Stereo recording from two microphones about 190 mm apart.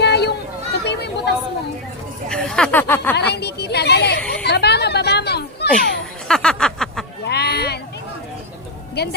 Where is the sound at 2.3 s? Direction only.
5° left (ahead or behind).